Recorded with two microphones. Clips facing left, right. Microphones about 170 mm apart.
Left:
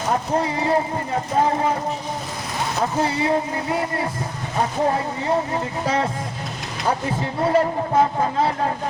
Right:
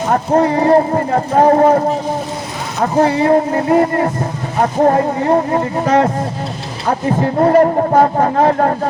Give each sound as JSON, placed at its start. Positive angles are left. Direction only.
{"t": 0.1, "sound": "speech", "side_deg": -55}
{"t": 3.0, "sound": "speech", "side_deg": -50}
{"t": 7.2, "sound": "speech", "side_deg": -50}